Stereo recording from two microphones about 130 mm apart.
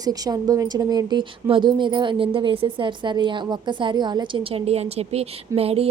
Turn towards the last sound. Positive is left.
turn(degrees=-50)  # may be behind; listen again after turning